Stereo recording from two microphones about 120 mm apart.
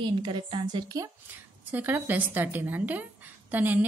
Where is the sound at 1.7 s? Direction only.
15° right (ahead or behind).